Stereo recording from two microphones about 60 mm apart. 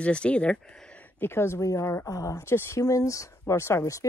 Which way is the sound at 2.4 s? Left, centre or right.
Left.